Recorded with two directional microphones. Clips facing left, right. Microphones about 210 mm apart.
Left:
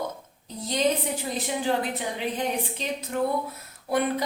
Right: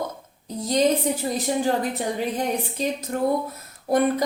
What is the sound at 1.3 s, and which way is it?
Speech, 45° right (ahead or behind).